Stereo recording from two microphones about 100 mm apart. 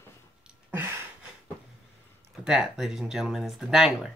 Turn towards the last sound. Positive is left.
turn(degrees=-5)  # may be behind; listen again after turning